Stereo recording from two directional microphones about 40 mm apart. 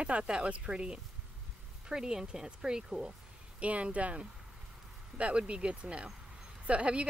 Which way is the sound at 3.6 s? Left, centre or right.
Right.